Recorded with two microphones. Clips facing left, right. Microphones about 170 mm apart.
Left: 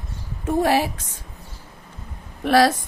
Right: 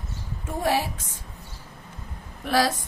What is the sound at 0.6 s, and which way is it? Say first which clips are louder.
Speech: left 3 dB; 75° left (ahead or behind).